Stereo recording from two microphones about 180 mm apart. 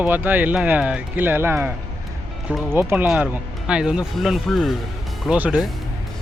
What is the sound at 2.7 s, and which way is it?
Speech, 10° right (ahead or behind).